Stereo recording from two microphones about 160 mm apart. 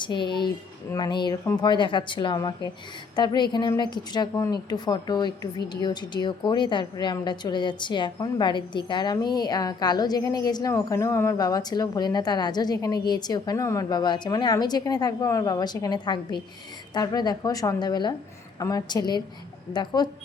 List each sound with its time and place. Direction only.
0.0 s a woman's voice: 30° left (ahead or behind)